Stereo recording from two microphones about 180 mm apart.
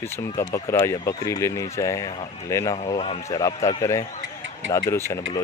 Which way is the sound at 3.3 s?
20° left (ahead or behind).